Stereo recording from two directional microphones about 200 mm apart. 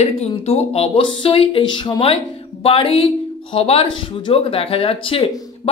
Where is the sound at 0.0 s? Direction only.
30° left (ahead or behind).